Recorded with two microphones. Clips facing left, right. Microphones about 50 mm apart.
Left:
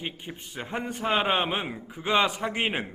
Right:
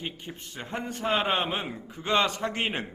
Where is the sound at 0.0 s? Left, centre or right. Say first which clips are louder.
Left 1 dB; centre.